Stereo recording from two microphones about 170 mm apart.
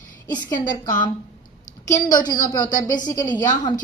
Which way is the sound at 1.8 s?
20° left (ahead or behind).